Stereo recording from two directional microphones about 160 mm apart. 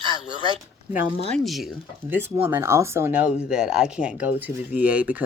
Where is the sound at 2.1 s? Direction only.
10° right (ahead or behind).